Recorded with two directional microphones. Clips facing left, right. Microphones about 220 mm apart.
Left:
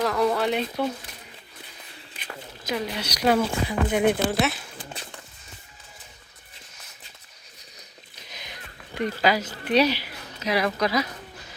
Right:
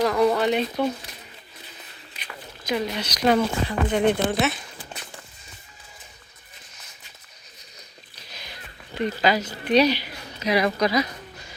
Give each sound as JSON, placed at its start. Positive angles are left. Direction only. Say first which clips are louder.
{"t": 0.0, "sound": "speech", "louder": "right 3 dB", "side_deg": 0}
{"t": 2.6, "sound": "speech", "louder": "right 3 dB", "side_deg": 5}
{"t": 8.1, "sound": "a sound", "louder": "even", "side_deg": 20}
{"t": 9.2, "sound": "speech", "louder": "even", "side_deg": 10}